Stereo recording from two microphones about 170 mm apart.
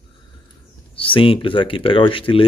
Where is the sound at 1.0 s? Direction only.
30° left (ahead or behind).